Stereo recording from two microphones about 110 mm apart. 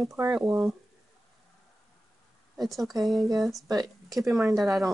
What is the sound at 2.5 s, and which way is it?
Speech, centre (ahead or behind).